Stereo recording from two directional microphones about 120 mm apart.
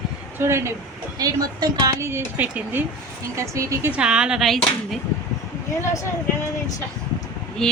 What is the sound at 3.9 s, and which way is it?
Speech, 10° right (ahead or behind).